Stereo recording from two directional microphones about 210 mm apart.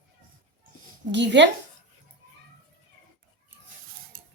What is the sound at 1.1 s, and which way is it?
Speech, 55° right (ahead or behind).